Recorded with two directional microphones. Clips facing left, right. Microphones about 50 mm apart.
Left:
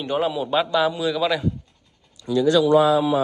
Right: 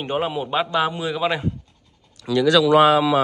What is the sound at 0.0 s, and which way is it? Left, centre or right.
A man's voice, right.